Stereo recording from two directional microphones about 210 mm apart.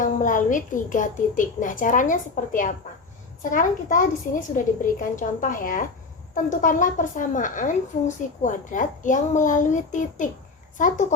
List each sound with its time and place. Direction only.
0.0 s a woman's voice: 40° left (ahead or behind)